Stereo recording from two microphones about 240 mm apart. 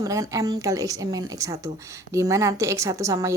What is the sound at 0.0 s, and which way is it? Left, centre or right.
A woman's voice, centre.